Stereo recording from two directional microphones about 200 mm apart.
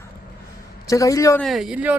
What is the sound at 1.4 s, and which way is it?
Speech, centre (ahead or behind).